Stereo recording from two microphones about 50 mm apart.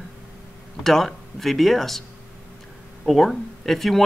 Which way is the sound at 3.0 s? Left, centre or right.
Centre.